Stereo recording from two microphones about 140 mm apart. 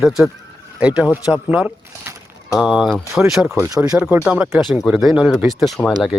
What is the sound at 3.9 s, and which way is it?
Speech, 15° right (ahead or behind).